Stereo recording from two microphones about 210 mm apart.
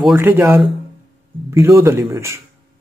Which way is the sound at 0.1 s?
10° right (ahead or behind).